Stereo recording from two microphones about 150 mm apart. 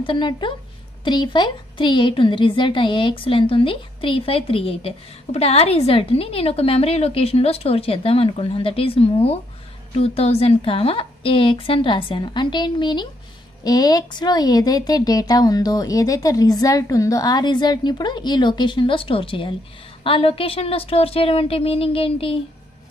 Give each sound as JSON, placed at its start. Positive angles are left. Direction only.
{"t": 0.0, "sound": "a woman's voice", "side_deg": 35}